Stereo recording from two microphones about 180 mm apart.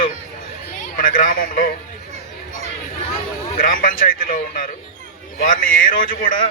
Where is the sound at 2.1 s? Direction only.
40° right (ahead or behind).